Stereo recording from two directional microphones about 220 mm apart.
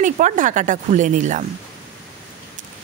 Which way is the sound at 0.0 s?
35° right (ahead or behind).